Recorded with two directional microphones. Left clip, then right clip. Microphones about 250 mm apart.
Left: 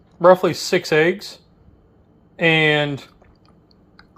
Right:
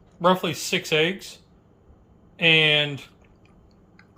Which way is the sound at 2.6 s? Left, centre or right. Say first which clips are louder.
Left 2 dB; left.